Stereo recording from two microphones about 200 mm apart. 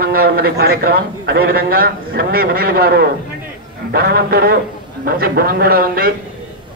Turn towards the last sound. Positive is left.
turn(degrees=-45)  # may be behind; listen again after turning